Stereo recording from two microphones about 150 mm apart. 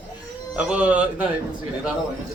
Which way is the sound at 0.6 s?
10° right (ahead or behind).